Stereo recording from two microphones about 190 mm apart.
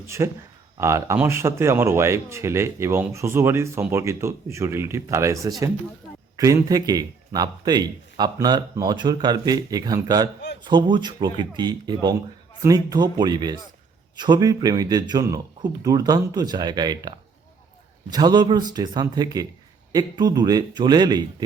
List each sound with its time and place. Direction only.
0.2 s a man's voice: 15° right (ahead or behind)